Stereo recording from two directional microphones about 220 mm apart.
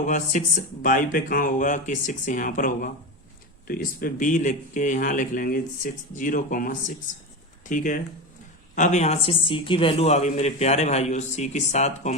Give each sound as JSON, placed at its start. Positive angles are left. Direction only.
{"t": 0.0, "sound": "a man's voice", "side_deg": 35}